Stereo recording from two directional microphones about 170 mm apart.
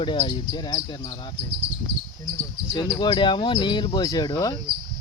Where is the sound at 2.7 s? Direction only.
25° left (ahead or behind).